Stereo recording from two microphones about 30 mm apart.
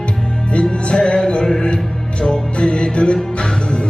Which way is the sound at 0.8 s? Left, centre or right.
Left.